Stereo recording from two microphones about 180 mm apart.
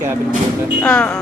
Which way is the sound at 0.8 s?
5° left (ahead or behind).